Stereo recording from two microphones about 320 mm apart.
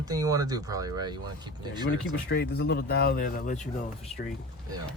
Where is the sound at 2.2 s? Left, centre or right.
Left.